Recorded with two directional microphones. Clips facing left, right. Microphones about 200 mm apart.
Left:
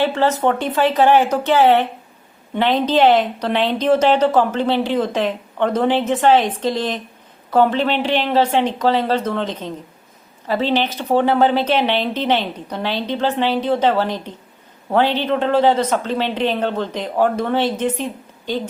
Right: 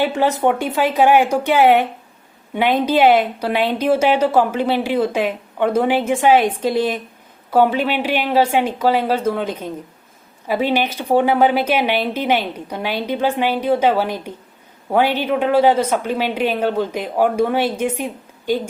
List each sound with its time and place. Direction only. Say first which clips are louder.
0.0 s a woman's voice: even; 15° right (ahead or behind)